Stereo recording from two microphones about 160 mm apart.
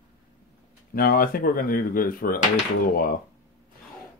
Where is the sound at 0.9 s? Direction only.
65° left (ahead or behind).